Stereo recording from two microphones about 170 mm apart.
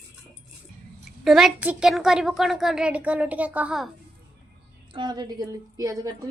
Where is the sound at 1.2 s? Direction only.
Centre (ahead or behind).